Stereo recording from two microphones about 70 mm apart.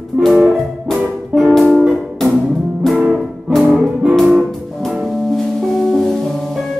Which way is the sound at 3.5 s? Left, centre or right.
Centre.